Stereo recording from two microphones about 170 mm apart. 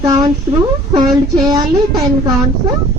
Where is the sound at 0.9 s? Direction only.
25° right (ahead or behind).